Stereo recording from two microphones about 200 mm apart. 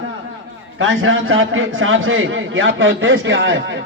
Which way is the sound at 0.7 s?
75° right (ahead or behind).